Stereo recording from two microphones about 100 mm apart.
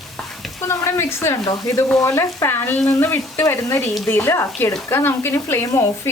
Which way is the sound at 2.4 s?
20° left (ahead or behind).